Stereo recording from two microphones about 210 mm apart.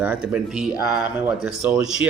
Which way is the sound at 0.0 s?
5° right (ahead or behind).